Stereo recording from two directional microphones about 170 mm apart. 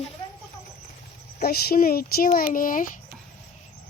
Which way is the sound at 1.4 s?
65° left (ahead or behind).